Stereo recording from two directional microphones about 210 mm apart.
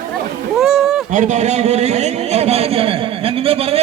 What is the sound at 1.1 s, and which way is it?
A man's voice, 35° right (ahead or behind).